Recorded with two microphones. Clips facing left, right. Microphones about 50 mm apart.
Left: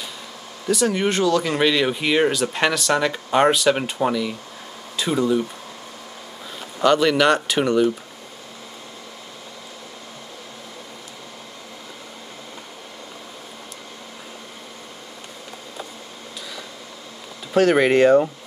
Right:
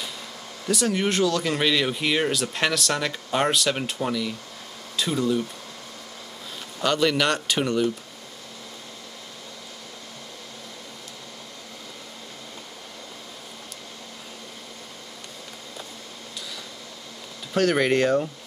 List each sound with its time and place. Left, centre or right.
0.7 s speech: centre
4.9 s a sound: centre
6.8 s speech: centre
17.6 s speech: centre